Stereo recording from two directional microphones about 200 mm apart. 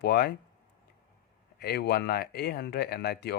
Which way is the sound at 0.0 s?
55° left (ahead or behind).